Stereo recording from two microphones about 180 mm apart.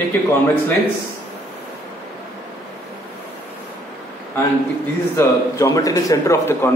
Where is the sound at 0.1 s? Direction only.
15° left (ahead or behind).